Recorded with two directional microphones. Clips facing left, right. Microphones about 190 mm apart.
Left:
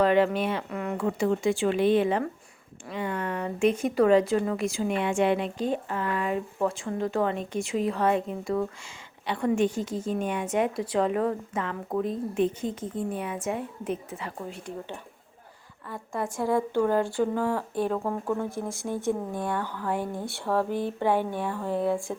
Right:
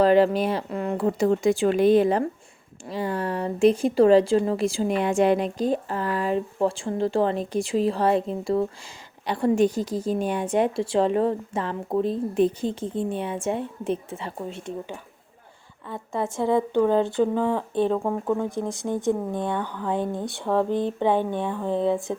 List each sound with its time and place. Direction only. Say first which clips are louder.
0.0 s a woman's voice: right 4 dB; 35° right (ahead or behind)
15.9 s a woman's voice: right 4 dB; 25° right (ahead or behind)